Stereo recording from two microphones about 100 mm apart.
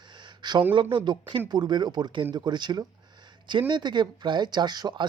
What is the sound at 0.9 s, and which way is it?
Speech, 50° right (ahead or behind).